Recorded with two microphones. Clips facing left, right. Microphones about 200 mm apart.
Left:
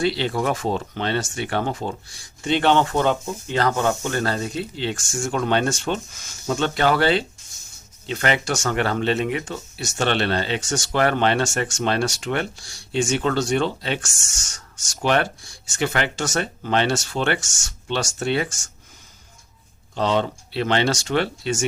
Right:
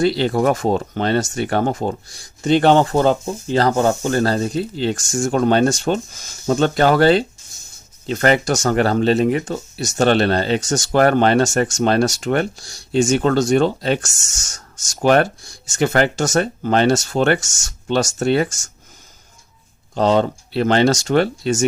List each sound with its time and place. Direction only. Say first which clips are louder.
0.0 s speech: right 6 dB; 45° right (ahead or behind)
20.0 s speech: right 6 dB; 45° right (ahead or behind)